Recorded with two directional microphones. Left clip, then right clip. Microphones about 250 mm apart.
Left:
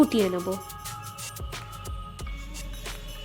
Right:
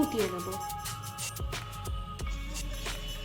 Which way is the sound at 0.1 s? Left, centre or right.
Left.